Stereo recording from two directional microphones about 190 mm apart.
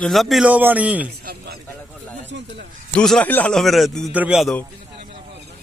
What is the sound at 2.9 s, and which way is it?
A man's voice, 5° left (ahead or behind).